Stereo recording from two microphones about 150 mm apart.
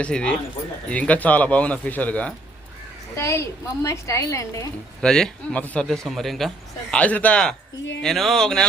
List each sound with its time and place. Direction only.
0.0 s a woman's voice: 5° left (ahead or behind)
4.9 s a man's voice: 5° left (ahead or behind)